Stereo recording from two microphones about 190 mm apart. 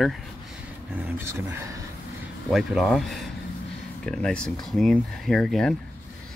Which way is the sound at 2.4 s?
Centre (ahead or behind).